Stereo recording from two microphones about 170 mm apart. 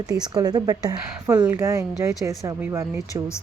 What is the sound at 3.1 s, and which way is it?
Speech, 15° left (ahead or behind).